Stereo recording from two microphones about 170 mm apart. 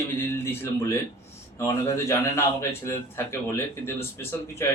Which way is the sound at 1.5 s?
15° left (ahead or behind).